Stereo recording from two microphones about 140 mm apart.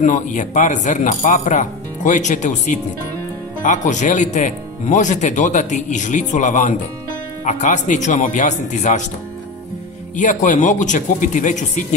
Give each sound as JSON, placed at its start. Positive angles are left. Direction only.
{"t": 0.0, "sound": "speech", "side_deg": 65}
{"t": 10.1, "sound": "speech", "side_deg": 65}